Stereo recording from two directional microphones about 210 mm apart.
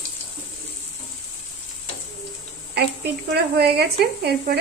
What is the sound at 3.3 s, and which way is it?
Speech, 50° right (ahead or behind).